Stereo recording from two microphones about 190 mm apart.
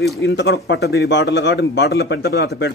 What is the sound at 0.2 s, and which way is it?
A man's voice, 70° left (ahead or behind).